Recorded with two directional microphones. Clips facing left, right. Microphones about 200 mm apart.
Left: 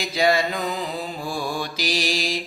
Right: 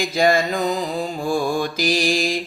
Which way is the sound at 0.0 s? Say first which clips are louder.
Right 3 dB; 50° right (ahead or behind).